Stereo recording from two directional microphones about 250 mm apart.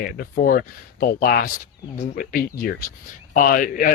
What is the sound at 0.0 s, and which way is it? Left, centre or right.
A man's voice, left.